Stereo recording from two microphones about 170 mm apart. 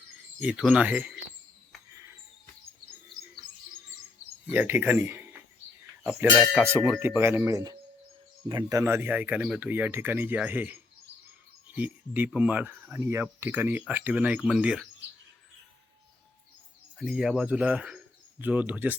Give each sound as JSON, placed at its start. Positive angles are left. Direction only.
{"t": 0.3, "sound": "speech", "side_deg": -5}
{"t": 1.9, "sound": "a sound", "side_deg": -20}
{"t": 4.5, "sound": "speech", "side_deg": -10}
{"t": 8.8, "sound": "speech", "side_deg": -15}
{"t": 17.0, "sound": "speech", "side_deg": 0}